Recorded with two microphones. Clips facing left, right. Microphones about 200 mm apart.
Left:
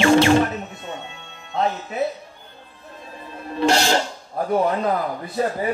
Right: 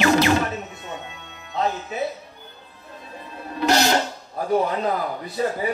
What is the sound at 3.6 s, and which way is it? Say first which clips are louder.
Speech: left 1 dB; 30° left (ahead or behind).